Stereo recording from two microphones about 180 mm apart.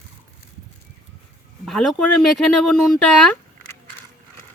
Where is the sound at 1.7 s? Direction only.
Centre (ahead or behind).